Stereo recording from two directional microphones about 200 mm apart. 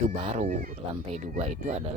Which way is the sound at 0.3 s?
40° right (ahead or behind).